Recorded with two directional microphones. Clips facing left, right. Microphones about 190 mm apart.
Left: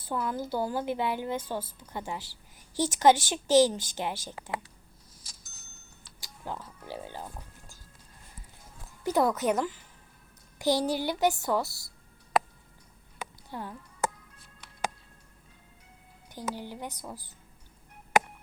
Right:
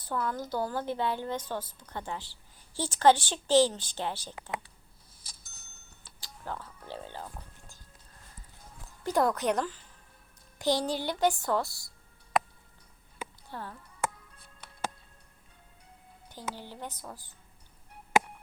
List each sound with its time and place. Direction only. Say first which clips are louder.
0.0 s speech: left 1 dB; 10° left (ahead or behind)
5.2 s bicycle bell: left 1 dB; 55° right (ahead or behind)
6.1 s speech: left 1 dB; 15° left (ahead or behind)
9.1 s speech: left 1 dB; 5° left (ahead or behind)
13.5 s speech: left 3 dB; 15° left (ahead or behind)
16.3 s speech: left 4 dB; 15° left (ahead or behind)